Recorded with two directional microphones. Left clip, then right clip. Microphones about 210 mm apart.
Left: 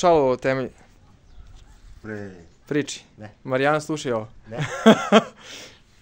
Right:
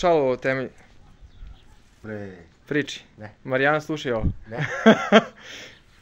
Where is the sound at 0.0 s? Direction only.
15° left (ahead or behind).